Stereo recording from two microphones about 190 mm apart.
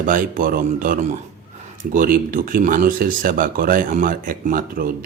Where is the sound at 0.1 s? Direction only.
45° right (ahead or behind).